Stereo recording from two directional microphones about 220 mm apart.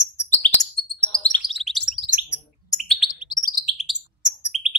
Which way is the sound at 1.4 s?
Centre (ahead or behind).